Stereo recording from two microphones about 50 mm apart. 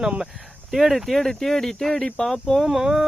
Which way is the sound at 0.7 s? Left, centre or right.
Centre.